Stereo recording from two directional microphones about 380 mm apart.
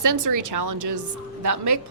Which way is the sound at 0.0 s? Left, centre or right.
Right.